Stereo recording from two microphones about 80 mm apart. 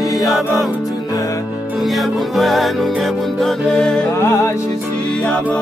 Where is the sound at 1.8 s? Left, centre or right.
Centre.